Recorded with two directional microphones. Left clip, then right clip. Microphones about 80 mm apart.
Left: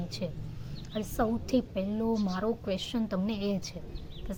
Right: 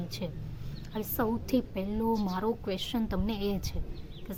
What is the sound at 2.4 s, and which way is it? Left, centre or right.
Speech, right.